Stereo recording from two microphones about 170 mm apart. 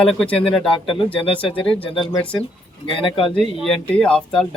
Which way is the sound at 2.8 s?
30° left (ahead or behind).